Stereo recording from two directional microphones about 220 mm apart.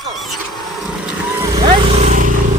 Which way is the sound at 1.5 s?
25° right (ahead or behind).